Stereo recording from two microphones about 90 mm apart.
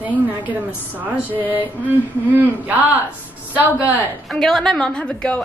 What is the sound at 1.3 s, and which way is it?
A woman's voice, 20° right (ahead or behind).